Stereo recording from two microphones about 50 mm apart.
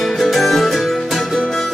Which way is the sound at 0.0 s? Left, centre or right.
Centre.